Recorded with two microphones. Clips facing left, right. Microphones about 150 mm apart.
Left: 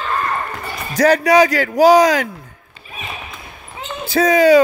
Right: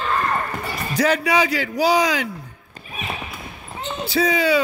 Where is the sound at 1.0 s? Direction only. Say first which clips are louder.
Left 7 dB; 40° left (ahead or behind).